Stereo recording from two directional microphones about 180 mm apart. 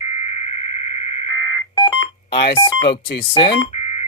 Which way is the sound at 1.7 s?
20° left (ahead or behind).